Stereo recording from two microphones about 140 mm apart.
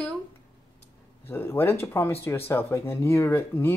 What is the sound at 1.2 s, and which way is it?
Speech, 15° left (ahead or behind).